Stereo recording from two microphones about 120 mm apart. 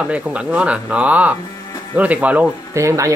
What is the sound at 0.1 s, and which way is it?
Speech, 10° right (ahead or behind).